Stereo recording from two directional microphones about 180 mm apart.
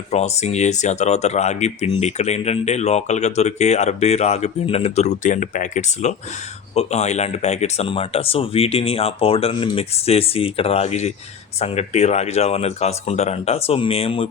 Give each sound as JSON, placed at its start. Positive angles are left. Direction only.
{"t": 0.1, "sound": "speech", "side_deg": 35}